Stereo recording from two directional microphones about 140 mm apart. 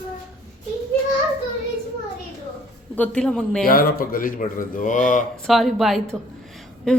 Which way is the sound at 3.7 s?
90° left.